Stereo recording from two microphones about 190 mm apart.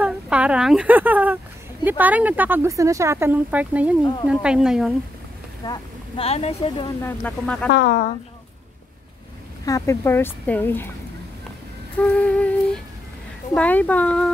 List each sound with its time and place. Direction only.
0.0 s speech: 5° right (ahead or behind)
5.7 s speech: 30° left (ahead or behind)
7.0 s speech: 10° left (ahead or behind)
7.7 s speech: 50° left (ahead or behind)
9.7 s speech: 15° left (ahead or behind)
12.0 s speech: 5° left (ahead or behind)
13.6 s speech: 10° left (ahead or behind)